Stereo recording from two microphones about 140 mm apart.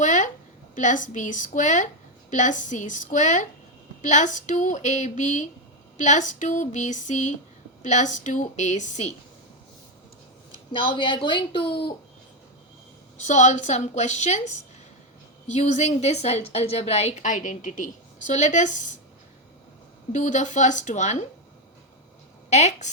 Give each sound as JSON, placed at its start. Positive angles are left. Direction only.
{"t": 0.0, "sound": "a sound", "side_deg": 60}
{"t": 0.8, "sound": "a woman's voice", "side_deg": 65}
{"t": 10.7, "sound": "speech", "side_deg": 35}
{"t": 13.1, "sound": "a woman's voice", "side_deg": 60}
{"t": 20.1, "sound": "a woman's voice", "side_deg": 60}
{"t": 22.4, "sound": "speech", "side_deg": 55}